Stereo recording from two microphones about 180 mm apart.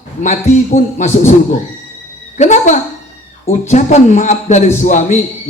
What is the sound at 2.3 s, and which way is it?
A man's voice, 40° left (ahead or behind).